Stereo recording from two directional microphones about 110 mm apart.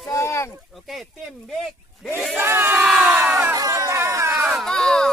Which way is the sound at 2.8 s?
5° right (ahead or behind).